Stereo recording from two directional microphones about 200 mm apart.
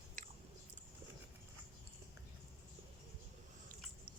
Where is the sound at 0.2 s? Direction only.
40° right (ahead or behind).